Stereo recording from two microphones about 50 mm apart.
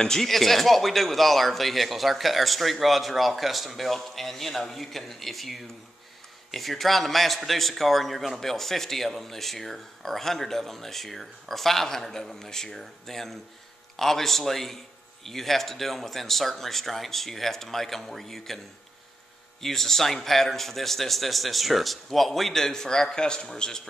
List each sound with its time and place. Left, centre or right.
0.0 s a man's voice: centre
19.6 s a man's voice: centre